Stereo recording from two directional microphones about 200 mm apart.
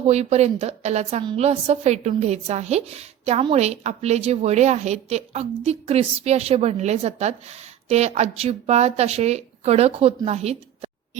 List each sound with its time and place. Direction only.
0.0 s a woman's voice: 30° right (ahead or behind)